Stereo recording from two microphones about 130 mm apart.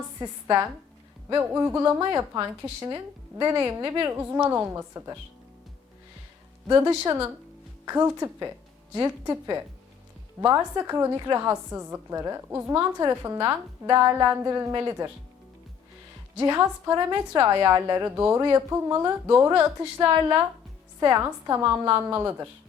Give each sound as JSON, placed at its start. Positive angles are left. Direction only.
{"t": 0.2, "sound": "a woman's voice", "side_deg": -25}
{"t": 3.5, "sound": "a woman's voice", "side_deg": -15}
{"t": 6.7, "sound": "a woman's voice", "side_deg": -30}
{"t": 13.8, "sound": "a sound", "side_deg": -30}
{"t": 14.3, "sound": "a woman's voice", "side_deg": -20}
{"t": 16.4, "sound": "a woman's voice", "side_deg": -25}